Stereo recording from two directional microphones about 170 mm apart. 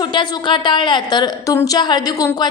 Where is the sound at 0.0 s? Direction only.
25° left (ahead or behind).